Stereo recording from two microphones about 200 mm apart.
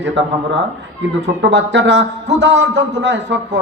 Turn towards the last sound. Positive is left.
turn(degrees=-60)  # may be behind; listen again after turning